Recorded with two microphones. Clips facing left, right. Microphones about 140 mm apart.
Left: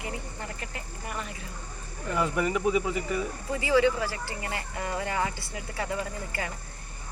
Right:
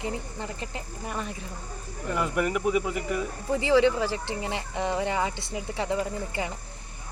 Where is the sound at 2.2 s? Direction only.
Centre (ahead or behind).